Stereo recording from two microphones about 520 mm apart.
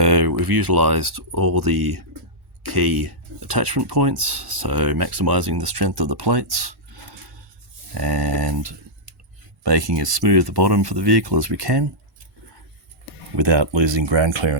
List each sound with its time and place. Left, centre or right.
0.0 s speech: right
4.4 s speech: right
4.7 s speech: right
7.9 s speech: right
9.6 s speech: right
13.3 s speech: right